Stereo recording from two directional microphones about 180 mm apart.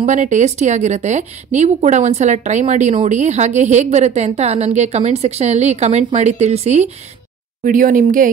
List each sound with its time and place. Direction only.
0.0 s a woman's voice: 45° right (ahead or behind)
7.6 s speech: 50° right (ahead or behind)